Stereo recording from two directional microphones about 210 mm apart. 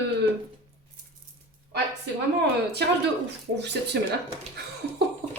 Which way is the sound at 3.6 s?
55° right (ahead or behind).